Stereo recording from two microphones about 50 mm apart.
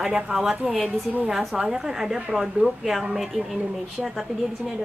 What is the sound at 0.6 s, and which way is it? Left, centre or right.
A woman's voice, centre.